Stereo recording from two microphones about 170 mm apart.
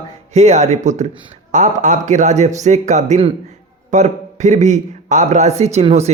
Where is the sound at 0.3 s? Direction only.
40° right (ahead or behind).